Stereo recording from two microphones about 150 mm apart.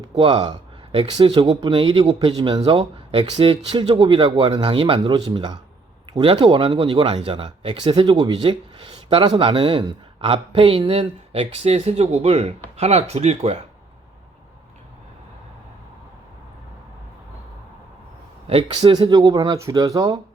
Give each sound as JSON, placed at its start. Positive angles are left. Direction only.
{"t": 0.2, "sound": "speech", "side_deg": -35}
{"t": 18.4, "sound": "speech", "side_deg": -35}